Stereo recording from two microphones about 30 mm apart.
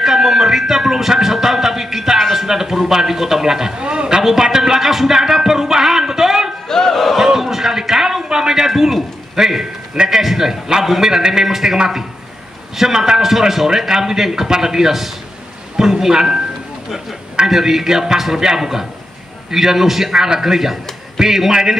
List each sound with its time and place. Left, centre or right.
0.0 s music: centre
2.3 s speech: centre
3.8 s a sound: right
4.2 s music: centre
6.9 s battle cry: centre
7.2 s a sound: centre
11.0 s a man's voice: centre
13.3 s a man's voice: centre
17.5 s a man's voice: centre